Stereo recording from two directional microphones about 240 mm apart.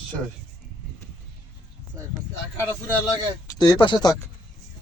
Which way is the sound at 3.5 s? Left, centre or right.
Centre.